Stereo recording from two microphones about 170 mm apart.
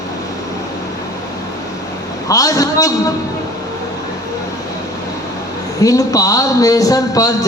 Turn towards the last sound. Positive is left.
turn(degrees=20)  # may be behind; listen again after turning